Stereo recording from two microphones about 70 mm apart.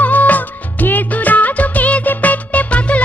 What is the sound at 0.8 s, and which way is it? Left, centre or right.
Music of bollywood, left.